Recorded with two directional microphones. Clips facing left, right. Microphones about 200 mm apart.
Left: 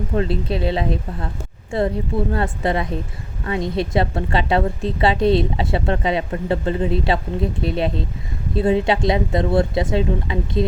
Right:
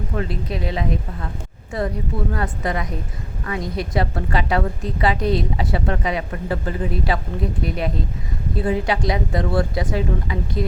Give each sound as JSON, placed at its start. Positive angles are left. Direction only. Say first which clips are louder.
{"t": 0.1, "sound": "a woman's voice", "louder": "left 5 dB", "side_deg": 30}